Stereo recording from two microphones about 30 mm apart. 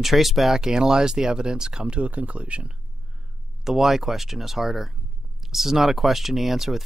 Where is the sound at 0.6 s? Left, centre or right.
Right.